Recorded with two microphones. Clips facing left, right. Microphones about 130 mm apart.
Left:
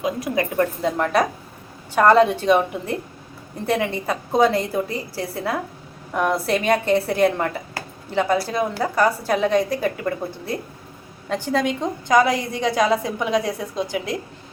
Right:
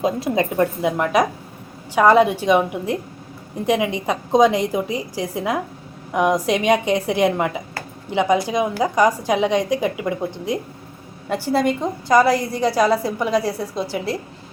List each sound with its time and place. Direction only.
0.0 s a woman's voice: 25° right (ahead or behind); by 13.8 s 5° right (ahead or behind)